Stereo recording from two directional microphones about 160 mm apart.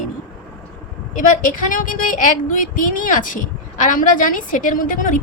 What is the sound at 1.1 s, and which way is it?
A woman's voice, 55° left (ahead or behind).